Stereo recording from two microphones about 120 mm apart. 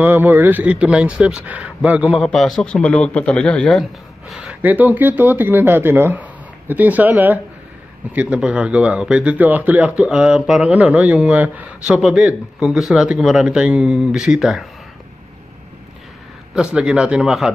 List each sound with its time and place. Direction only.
0.0 s speech: 15° right (ahead or behind)
2.2 s a man's voice: centre (ahead or behind)
4.3 s speech: 10° right (ahead or behind)
16.7 s speech: 5° right (ahead or behind)